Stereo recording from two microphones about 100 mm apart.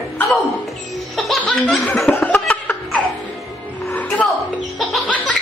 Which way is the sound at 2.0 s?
20° left (ahead or behind).